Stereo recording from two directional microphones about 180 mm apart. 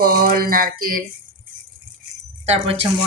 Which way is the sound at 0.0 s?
55° right (ahead or behind).